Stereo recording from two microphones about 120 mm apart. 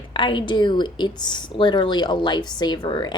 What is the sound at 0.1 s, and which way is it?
A woman's voice, 40° left (ahead or behind).